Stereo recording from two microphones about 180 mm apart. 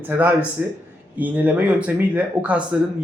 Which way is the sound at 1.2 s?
10° right (ahead or behind).